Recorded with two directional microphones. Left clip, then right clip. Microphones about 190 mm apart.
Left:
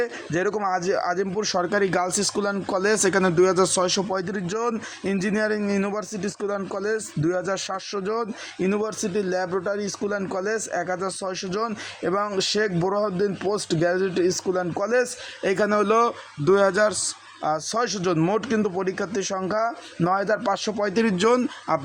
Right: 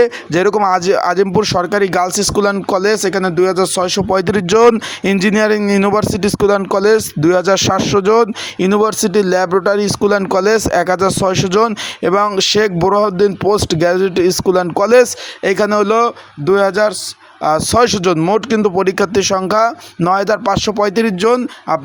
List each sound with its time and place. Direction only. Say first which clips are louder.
0.0 s speech: right 12 dB; 30° right (ahead or behind)
18.2 s speech: right 10 dB; 25° right (ahead or behind)